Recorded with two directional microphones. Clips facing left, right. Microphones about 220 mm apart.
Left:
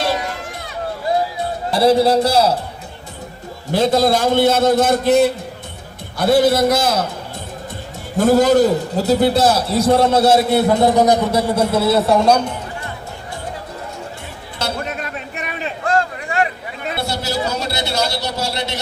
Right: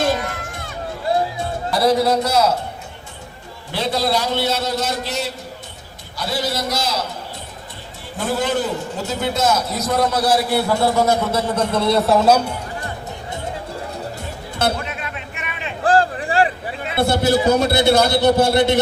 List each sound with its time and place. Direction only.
1.7 s a man's voice: 30° left (ahead or behind)
3.7 s a man's voice: 45° left (ahead or behind)
8.2 s a man's voice: 40° left (ahead or behind); by 12.5 s 5° right (ahead or behind)
14.8 s a sound: 40° left (ahead or behind)
15.8 s a sound: 35° right (ahead or behind)
17.0 s a man's voice: 55° right (ahead or behind)